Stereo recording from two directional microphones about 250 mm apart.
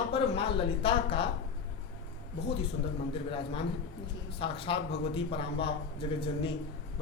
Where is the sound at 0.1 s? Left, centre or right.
Left.